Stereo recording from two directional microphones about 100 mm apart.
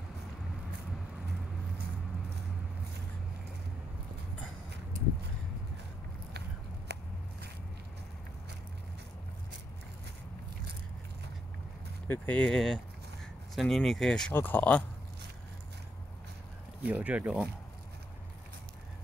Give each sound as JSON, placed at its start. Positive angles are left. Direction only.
{"t": 12.1, "sound": "speech", "side_deg": 15}
{"t": 14.3, "sound": "speech", "side_deg": 20}
{"t": 16.8, "sound": "speech", "side_deg": -15}